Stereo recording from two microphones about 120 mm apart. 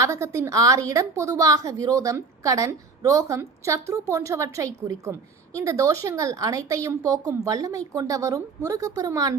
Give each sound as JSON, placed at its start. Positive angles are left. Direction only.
{"t": 0.0, "sound": "a woman's voice", "side_deg": -25}